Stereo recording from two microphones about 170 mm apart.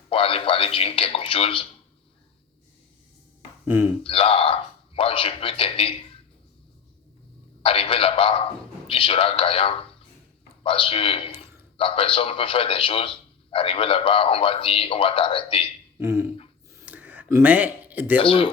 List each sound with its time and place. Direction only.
0.1 s a man's voice: 35° left (ahead or behind)
3.7 s speech: 10° right (ahead or behind)
4.0 s a man's voice: 30° left (ahead or behind)
7.6 s a man's voice: 30° left (ahead or behind)
16.0 s a sound: 15° right (ahead or behind)
18.2 s a man's voice: 30° left (ahead or behind)